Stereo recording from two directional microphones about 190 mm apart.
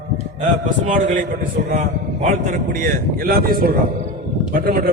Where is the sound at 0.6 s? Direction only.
40° right (ahead or behind).